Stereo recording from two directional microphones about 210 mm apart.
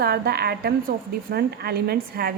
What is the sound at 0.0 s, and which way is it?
A woman's voice, 50° right (ahead or behind).